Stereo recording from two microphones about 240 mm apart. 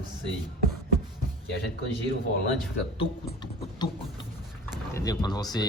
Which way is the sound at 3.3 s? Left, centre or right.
Centre.